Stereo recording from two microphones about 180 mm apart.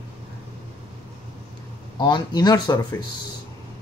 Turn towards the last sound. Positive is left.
turn(degrees=25)  # may be behind; listen again after turning